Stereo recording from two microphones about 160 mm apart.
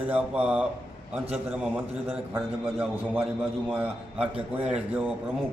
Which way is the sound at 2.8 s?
5° right (ahead or behind).